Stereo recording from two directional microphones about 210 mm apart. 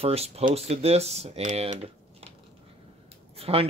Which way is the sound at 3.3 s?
25° right (ahead or behind).